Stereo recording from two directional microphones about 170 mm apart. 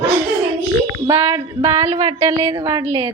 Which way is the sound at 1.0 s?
15° right (ahead or behind).